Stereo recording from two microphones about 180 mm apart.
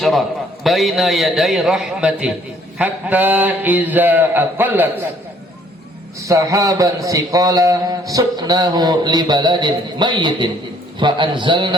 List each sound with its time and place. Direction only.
0.0 s a man's voice: centre (ahead or behind)
2.7 s a sound: 10° right (ahead or behind)
6.2 s a man's voice: 20° right (ahead or behind)